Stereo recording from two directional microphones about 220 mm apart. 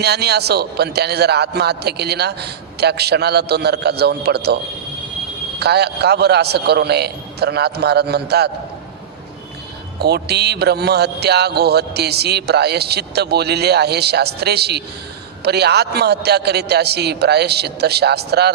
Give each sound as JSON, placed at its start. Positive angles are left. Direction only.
{"t": 0.0, "sound": "a man's voice", "side_deg": -45}
{"t": 10.0, "sound": "a man's voice", "side_deg": -45}